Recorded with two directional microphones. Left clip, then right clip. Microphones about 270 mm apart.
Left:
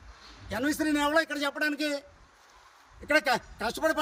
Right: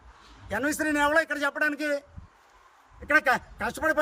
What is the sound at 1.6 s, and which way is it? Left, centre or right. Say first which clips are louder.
Speech: right 2 dB; right.